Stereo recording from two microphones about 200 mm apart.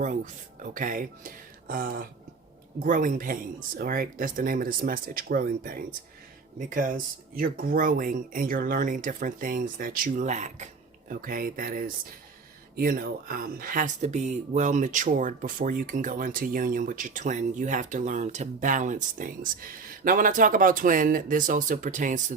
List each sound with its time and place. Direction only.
0.6 s speech: 40° right (ahead or behind)